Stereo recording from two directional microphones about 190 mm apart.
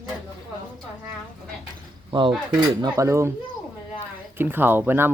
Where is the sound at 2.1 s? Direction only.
25° right (ahead or behind).